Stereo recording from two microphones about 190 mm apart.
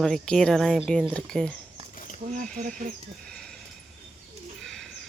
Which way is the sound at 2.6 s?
45° right (ahead or behind).